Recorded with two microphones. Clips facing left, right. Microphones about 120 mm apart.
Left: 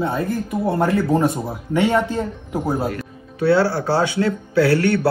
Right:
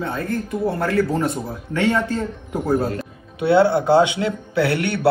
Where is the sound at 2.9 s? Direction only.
25° right (ahead or behind).